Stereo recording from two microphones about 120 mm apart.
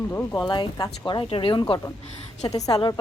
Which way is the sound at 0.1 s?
15° left (ahead or behind).